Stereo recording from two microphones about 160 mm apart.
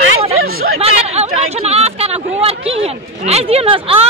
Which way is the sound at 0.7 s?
40° right (ahead or behind).